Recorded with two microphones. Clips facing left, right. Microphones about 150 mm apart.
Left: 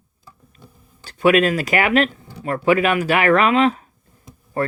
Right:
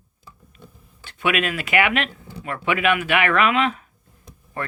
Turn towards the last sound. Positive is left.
turn(degrees=35)  # may be behind; listen again after turning